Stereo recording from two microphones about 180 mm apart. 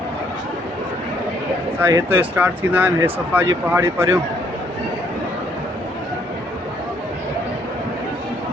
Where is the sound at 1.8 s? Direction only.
15° right (ahead or behind).